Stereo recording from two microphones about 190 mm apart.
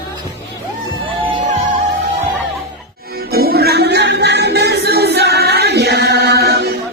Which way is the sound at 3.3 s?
55° right (ahead or behind).